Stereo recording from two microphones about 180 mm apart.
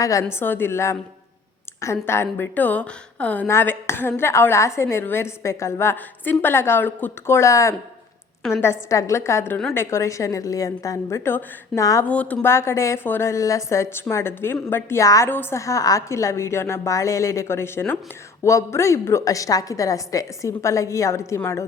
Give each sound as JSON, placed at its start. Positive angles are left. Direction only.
{"t": 0.0, "sound": "a woman's voice", "side_deg": 15}